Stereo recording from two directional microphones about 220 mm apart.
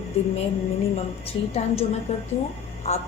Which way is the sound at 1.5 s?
30° left (ahead or behind).